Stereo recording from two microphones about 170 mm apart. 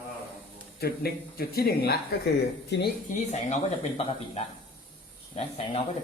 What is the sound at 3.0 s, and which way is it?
Speech, 45° left (ahead or behind).